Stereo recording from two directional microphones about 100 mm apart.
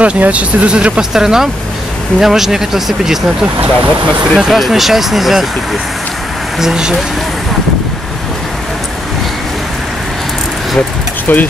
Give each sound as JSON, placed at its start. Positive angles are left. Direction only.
{"t": 0.0, "sound": "speech", "side_deg": -15}
{"t": 4.4, "sound": "speech", "side_deg": 0}
{"t": 11.3, "sound": "speech", "side_deg": 20}